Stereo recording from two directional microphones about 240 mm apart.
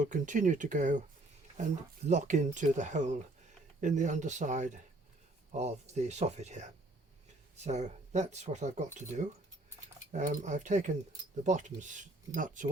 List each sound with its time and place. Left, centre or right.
0.0 s speech: right